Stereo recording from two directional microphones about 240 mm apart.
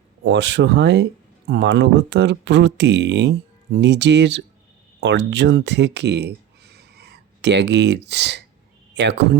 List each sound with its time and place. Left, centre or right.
0.3 s speech: right